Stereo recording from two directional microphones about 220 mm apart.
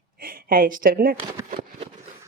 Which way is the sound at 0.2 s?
40° right (ahead or behind).